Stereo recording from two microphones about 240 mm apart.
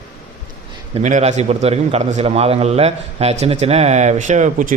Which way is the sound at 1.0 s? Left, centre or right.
Right.